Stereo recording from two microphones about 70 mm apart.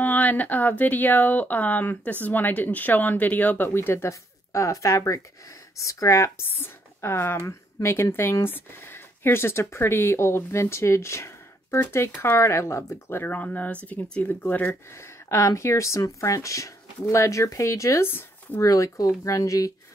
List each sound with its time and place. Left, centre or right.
0.0 s speech: left
14.4 s speech: left
18.0 s speech: left
18.6 s speech: left